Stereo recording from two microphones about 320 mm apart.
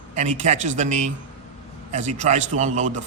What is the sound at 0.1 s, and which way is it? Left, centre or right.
Speech, right.